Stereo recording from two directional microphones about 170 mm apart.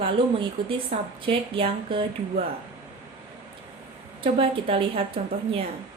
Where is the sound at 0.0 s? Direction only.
30° right (ahead or behind).